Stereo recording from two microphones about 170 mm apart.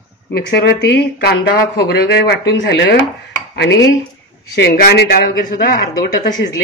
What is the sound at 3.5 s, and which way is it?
Dishes, 90° left.